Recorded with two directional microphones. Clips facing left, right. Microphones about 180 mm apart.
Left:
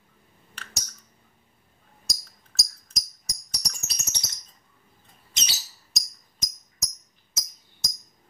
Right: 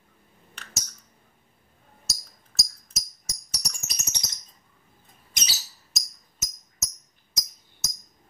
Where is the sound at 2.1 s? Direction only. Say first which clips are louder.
Left 1 dB; 5° right (ahead or behind).